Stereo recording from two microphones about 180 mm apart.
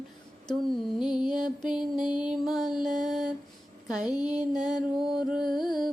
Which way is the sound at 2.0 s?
25° left (ahead or behind).